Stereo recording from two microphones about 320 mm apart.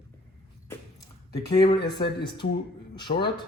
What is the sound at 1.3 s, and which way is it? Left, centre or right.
A man's voice, centre.